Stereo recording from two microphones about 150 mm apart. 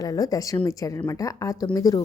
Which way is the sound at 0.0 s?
25° left (ahead or behind).